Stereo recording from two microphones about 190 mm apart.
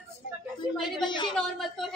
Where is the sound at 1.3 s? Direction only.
Centre (ahead or behind).